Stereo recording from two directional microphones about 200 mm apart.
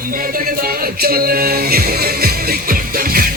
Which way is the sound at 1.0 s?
50° right (ahead or behind).